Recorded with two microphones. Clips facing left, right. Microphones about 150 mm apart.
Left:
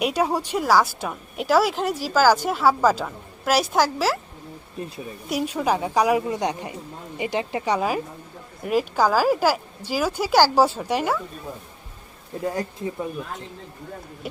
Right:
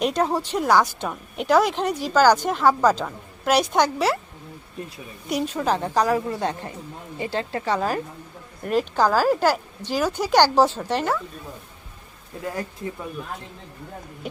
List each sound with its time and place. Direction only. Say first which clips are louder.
0.0 s speech: even; 10° left (ahead or behind)
5.3 s speech: even; 5° left (ahead or behind)
12.3 s speech: left 5 dB; 30° left (ahead or behind)